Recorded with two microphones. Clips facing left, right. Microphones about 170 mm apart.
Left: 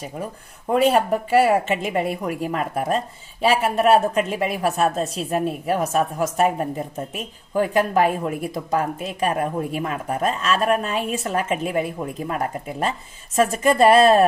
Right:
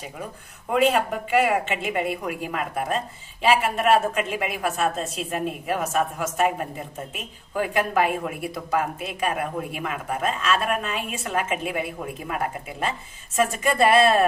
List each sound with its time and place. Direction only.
0.7 s speech: 40° left (ahead or behind)